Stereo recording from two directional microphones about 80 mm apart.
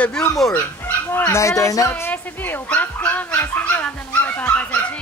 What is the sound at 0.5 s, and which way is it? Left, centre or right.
Speech, left.